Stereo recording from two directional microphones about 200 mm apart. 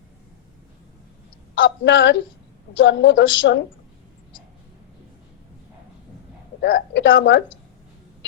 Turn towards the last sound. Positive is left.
turn(degrees=60)  # may be behind; listen again after turning